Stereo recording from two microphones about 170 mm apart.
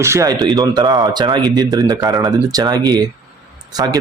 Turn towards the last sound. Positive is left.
turn(degrees=-25)  # may be behind; listen again after turning